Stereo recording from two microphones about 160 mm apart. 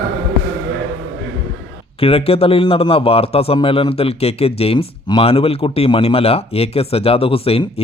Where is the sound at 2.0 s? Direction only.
35° left (ahead or behind).